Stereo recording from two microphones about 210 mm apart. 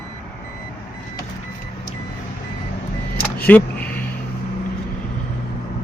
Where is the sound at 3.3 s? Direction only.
10° left (ahead or behind).